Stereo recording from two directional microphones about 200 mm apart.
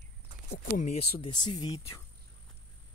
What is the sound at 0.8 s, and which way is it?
Speech, 30° left (ahead or behind).